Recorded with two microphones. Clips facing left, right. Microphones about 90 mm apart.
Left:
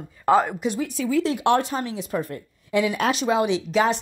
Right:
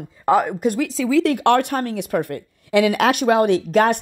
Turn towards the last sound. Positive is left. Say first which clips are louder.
# right 5 dB
turn(degrees=-50)  # may be behind; listen again after turning